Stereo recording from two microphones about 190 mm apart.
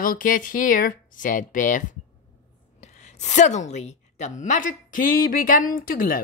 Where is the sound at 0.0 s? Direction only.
45° left (ahead or behind).